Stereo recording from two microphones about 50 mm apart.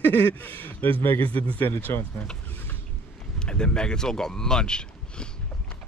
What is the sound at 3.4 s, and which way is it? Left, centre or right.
Speech, centre.